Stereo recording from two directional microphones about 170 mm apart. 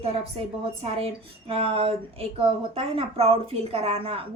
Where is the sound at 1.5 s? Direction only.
35° right (ahead or behind).